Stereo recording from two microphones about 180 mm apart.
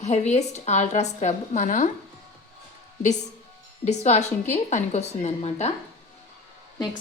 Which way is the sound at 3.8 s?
40° left (ahead or behind).